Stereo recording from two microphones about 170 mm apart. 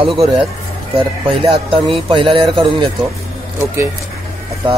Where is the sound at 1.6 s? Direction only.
30° right (ahead or behind).